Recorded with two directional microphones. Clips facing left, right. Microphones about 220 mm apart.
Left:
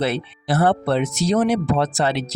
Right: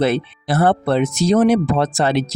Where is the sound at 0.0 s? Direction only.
50° right (ahead or behind).